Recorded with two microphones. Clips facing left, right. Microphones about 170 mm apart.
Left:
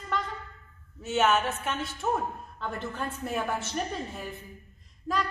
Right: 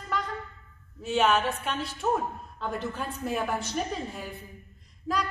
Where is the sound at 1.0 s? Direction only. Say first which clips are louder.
Right 1 dB; 5° left (ahead or behind).